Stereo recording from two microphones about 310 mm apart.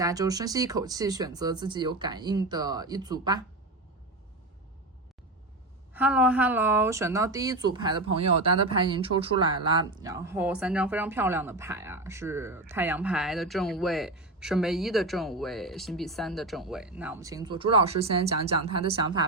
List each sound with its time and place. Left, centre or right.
0.0 s speech: centre
5.9 s speech: centre